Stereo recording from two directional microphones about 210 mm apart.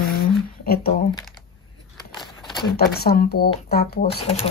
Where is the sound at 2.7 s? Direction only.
50° left (ahead or behind).